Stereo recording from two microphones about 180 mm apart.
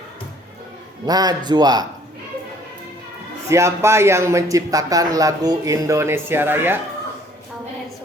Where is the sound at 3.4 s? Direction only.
15° right (ahead or behind).